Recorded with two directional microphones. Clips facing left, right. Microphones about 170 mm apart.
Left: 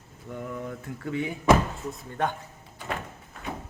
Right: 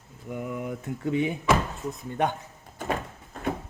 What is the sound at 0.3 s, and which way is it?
Speech, 10° right (ahead or behind).